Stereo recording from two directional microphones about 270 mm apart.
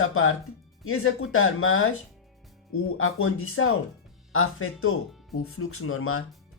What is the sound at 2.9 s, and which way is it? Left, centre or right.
Speech, left.